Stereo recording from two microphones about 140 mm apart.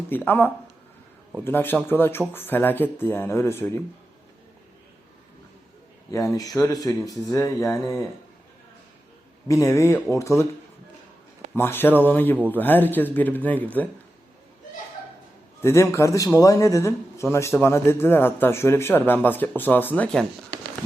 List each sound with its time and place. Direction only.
0.1 s a man's voice: 15° left (ahead or behind)
6.1 s speech: 25° left (ahead or behind)
9.5 s speech: 20° left (ahead or behind)
11.5 s a man's voice: 15° left (ahead or behind)
15.6 s a man's voice: 20° left (ahead or behind)